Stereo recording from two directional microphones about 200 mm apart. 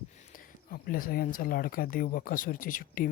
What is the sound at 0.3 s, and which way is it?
A man's voice, 45° left (ahead or behind).